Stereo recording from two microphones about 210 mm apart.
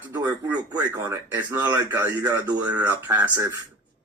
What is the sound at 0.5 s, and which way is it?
A man's voice, 20° right (ahead or behind).